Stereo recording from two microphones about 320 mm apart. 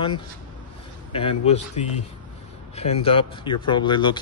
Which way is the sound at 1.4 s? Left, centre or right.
Left.